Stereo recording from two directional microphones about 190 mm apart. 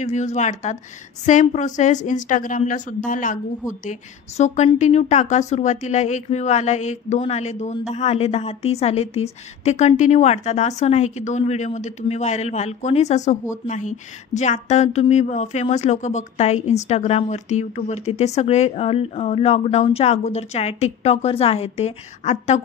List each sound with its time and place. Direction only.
0.0 s a woman's voice: 40° left (ahead or behind)